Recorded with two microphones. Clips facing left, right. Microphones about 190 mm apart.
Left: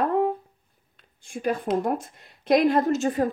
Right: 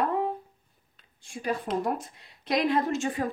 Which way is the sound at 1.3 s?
50° left (ahead or behind).